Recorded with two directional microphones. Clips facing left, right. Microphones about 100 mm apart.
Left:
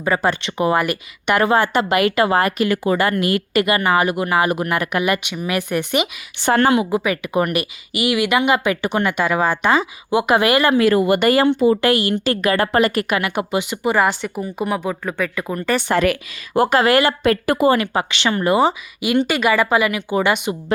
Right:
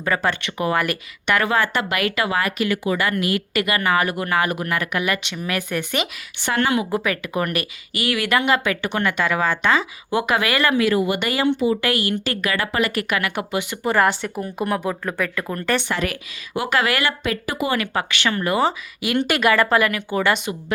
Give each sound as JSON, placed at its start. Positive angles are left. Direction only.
{"t": 0.0, "sound": "speech", "side_deg": 15}
{"t": 0.8, "sound": "speech", "side_deg": 10}
{"t": 1.4, "sound": "speech", "side_deg": 25}
{"t": 3.5, "sound": "speech", "side_deg": 25}
{"t": 6.4, "sound": "speech", "side_deg": 35}
{"t": 6.9, "sound": "speech", "side_deg": 10}
{"t": 10.8, "sound": "speech", "side_deg": 45}
{"t": 11.9, "sound": "speech", "side_deg": 30}
{"t": 12.9, "sound": "speech", "side_deg": 30}
{"t": 13.9, "sound": "speech", "side_deg": 5}
{"t": 16.6, "sound": "speech", "side_deg": 35}
{"t": 17.2, "sound": "speech", "side_deg": 50}
{"t": 17.7, "sound": "speech", "side_deg": 25}
{"t": 19.3, "sound": "speech", "side_deg": 0}